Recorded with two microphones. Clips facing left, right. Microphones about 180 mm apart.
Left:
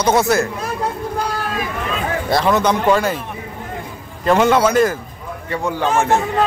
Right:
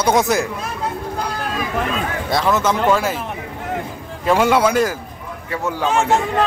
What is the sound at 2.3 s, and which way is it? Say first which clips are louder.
Speech: left 2 dB; centre (ahead or behind).